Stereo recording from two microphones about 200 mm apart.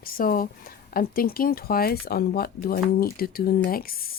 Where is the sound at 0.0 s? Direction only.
45° left (ahead or behind).